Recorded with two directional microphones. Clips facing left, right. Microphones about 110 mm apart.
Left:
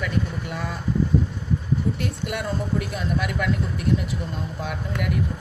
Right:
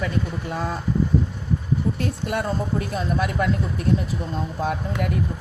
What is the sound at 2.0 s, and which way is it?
Speech, 35° right (ahead or behind).